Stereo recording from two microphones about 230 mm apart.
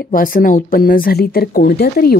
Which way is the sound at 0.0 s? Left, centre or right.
Left.